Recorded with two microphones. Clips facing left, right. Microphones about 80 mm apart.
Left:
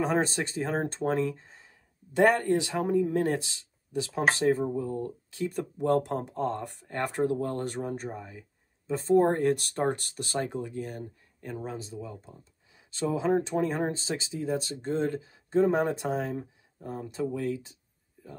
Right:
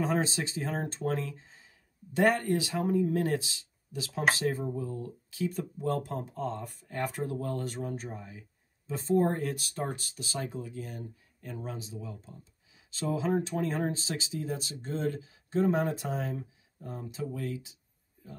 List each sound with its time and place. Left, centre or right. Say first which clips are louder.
0.0 s speech: left 3 dB; left